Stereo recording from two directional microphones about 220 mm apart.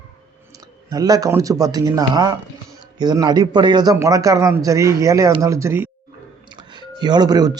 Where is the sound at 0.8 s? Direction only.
15° right (ahead or behind).